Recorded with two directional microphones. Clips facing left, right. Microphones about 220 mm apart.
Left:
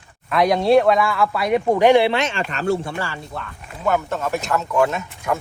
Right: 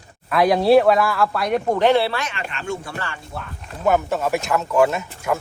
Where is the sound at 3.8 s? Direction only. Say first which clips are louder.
Right 2 dB; 15° right (ahead or behind).